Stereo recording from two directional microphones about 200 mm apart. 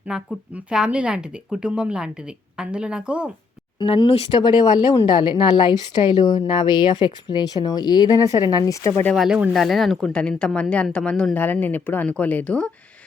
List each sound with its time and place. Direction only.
0.1 s speech: 5° right (ahead or behind)
3.8 s speech: 25° left (ahead or behind)
9.1 s speech: 5° right (ahead or behind)